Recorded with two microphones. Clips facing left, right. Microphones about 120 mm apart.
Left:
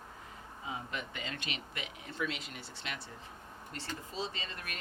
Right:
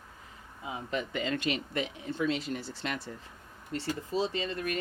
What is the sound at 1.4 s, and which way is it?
Speech, 40° right (ahead or behind).